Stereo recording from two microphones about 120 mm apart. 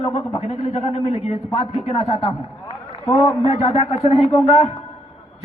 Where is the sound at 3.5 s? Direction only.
60° left (ahead or behind).